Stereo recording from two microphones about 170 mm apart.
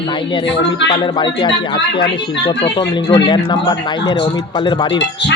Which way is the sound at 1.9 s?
30° left (ahead or behind).